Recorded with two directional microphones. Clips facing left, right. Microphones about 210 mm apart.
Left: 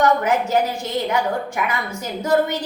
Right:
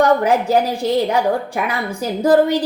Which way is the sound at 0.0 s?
35° right (ahead or behind).